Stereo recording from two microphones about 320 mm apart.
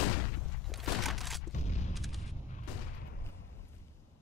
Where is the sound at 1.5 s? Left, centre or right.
Left.